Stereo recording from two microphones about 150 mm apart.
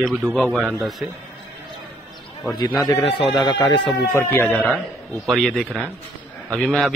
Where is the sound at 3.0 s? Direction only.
35° left (ahead or behind).